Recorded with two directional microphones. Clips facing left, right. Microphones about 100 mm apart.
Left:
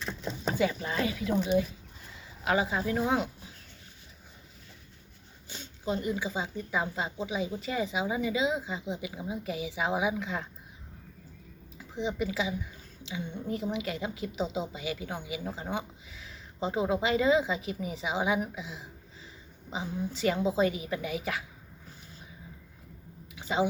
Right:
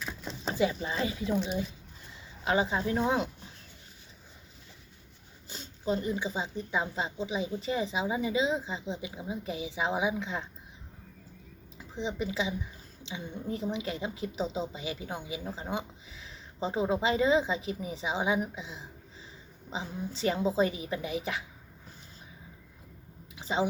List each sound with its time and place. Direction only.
0.4 s speech: 20° right (ahead or behind)
2.4 s speech: 30° right (ahead or behind)
5.5 s speech: 35° right (ahead or behind)
11.9 s speech: 30° right (ahead or behind)
16.2 s speech: 30° right (ahead or behind)
23.3 s a sound: 30° right (ahead or behind)